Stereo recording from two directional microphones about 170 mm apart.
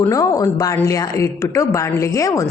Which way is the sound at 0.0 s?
20° left (ahead or behind).